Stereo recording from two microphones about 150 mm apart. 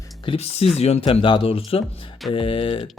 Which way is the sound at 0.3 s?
40° left (ahead or behind).